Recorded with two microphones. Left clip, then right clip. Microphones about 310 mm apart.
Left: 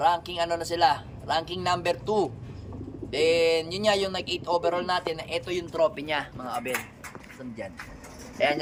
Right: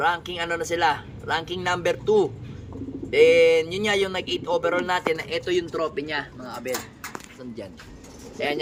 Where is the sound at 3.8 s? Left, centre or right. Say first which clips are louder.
Right 1 dB; centre.